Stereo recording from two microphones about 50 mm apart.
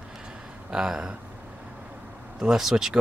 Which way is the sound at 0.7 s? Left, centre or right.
Centre.